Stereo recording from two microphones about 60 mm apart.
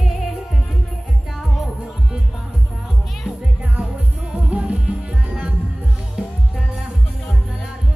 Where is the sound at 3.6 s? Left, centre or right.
Right.